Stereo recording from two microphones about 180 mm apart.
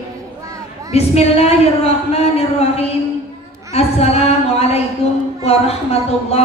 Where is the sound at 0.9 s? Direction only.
35° left (ahead or behind).